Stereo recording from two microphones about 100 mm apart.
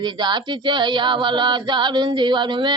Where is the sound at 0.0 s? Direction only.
45° right (ahead or behind).